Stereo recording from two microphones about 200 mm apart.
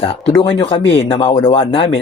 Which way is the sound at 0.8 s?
65° left (ahead or behind).